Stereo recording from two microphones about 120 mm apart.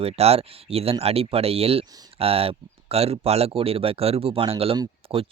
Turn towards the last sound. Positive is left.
turn(degrees=-45)  # may be behind; listen again after turning